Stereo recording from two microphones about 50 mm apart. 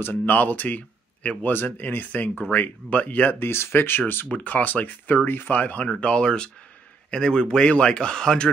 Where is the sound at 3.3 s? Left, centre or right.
Left.